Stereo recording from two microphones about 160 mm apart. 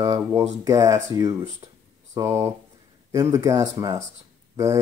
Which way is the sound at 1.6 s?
25° right (ahead or behind).